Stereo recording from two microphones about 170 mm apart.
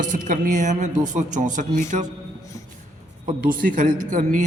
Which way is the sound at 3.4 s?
55° right (ahead or behind).